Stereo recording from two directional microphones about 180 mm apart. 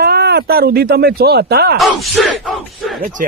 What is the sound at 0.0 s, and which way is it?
Speech, 65° right (ahead or behind).